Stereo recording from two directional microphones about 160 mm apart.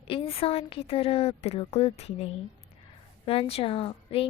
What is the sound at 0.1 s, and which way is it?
A woman's voice, 35° left (ahead or behind).